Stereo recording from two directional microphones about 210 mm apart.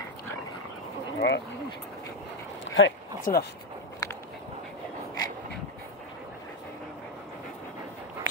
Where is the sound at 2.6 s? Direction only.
65° left (ahead or behind).